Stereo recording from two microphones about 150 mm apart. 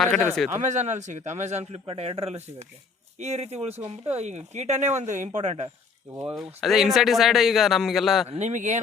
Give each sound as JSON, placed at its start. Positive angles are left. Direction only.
{"t": 0.0, "sound": "speech", "side_deg": 5}
{"t": 0.5, "sound": "speech", "side_deg": -50}
{"t": 6.3, "sound": "speech", "side_deg": 0}
{"t": 8.3, "sound": "speech", "side_deg": -50}